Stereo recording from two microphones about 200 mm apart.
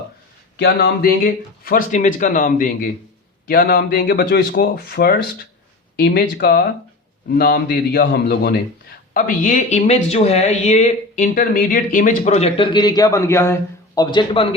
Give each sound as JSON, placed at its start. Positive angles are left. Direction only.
{"t": 0.5, "sound": "a man's voice", "side_deg": 55}